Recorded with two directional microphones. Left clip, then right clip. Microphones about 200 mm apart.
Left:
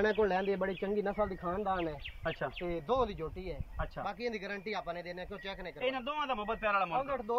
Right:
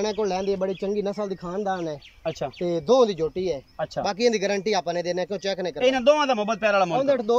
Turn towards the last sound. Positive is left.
turn(degrees=-45)  # may be behind; listen again after turning